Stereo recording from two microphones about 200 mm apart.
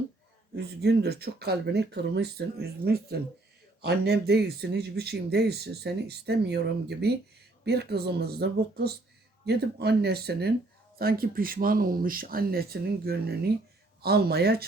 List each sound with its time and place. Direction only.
0.5 s speech: 55° right (ahead or behind)